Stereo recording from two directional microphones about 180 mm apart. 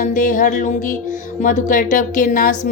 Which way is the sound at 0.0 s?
45° left (ahead or behind).